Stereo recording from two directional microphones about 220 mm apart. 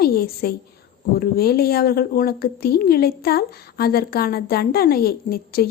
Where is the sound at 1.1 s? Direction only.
45° left (ahead or behind).